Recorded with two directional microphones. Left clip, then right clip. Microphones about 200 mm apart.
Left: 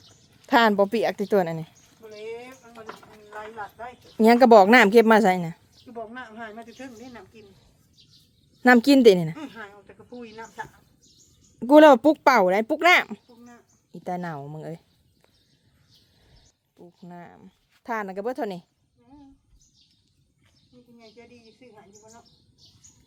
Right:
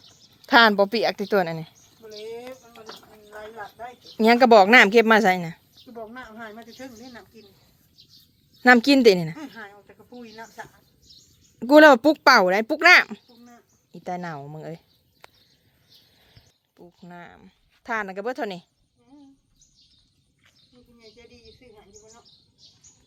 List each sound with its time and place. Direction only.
0.4 s speech: 5° left (ahead or behind)
2.2 s a sound: 30° right (ahead or behind)
4.2 s speech: 20° left (ahead or behind)
5.8 s a woman's voice: 20° right (ahead or behind)
8.6 s speech: 15° left (ahead or behind)
9.3 s speech: 15° right (ahead or behind)
11.6 s speech: 10° left (ahead or behind)
13.2 s a sound: 10° right (ahead or behind)
13.9 s speech: 15° left (ahead or behind)
16.7 s a sound: centre (ahead or behind)
17.2 s a woman's voice: 10° left (ahead or behind)